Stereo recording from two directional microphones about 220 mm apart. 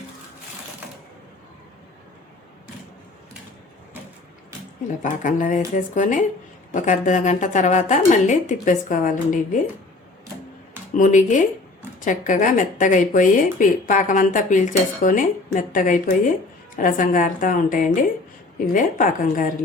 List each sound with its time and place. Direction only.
5.0 s speech: 35° left (ahead or behind)
10.9 s speech: 35° left (ahead or behind)